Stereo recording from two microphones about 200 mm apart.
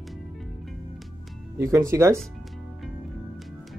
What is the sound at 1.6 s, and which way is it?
Speech, 15° right (ahead or behind).